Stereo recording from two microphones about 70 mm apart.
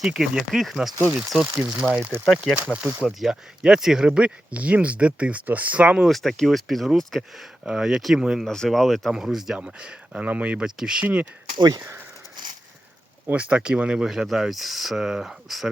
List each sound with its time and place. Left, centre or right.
0.0 s speech: centre
2.3 s speech: centre
6.1 s speech: centre
8.4 s speech: centre
11.0 s speech: right
11.5 s speech: right
13.2 s speech: centre